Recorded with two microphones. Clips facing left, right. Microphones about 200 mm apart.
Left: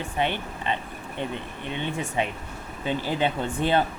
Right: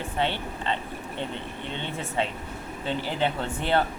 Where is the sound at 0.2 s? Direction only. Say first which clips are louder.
Left 1 dB; 15° left (ahead or behind).